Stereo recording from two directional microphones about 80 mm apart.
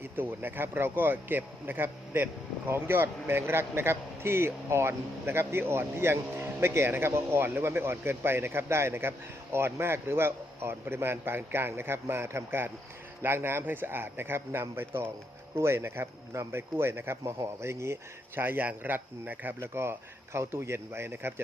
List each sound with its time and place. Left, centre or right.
0.0 s speech: right
18.3 s speech: right
19.5 s speech: right